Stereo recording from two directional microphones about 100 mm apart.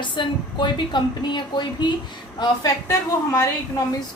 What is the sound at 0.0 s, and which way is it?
A woman's voice, 50° left (ahead or behind).